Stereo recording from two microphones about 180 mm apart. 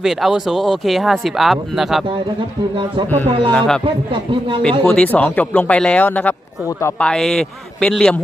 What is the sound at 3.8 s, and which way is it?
Speech, 30° right (ahead or behind).